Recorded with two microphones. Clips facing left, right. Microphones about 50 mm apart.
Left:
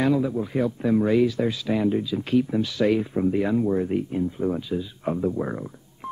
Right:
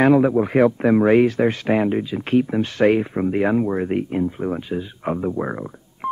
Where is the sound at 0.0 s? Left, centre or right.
Right.